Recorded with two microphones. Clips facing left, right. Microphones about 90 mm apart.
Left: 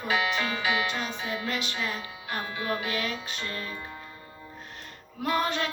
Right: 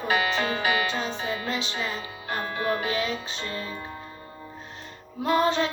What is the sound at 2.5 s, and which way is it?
Music, 40° right (ahead or behind).